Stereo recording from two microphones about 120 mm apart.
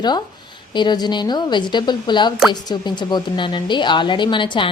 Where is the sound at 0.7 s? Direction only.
40° left (ahead or behind).